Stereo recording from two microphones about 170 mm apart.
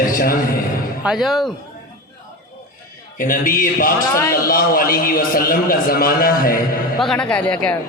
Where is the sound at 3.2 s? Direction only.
55° left (ahead or behind).